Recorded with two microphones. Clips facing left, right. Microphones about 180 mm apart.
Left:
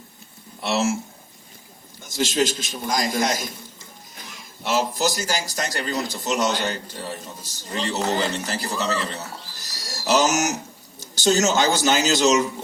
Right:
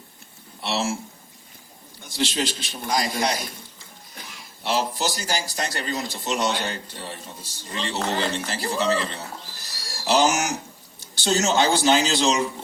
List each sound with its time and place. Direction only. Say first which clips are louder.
0.6 s a man's voice: left 4 dB; 45° left (ahead or behind)
2.0 s a man's voice: left 4 dB; 45° left (ahead or behind)
4.6 s a man's voice: left 2 dB; 45° left (ahead or behind)